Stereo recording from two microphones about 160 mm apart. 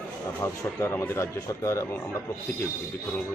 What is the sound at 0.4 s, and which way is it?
Speech, 15° left (ahead or behind).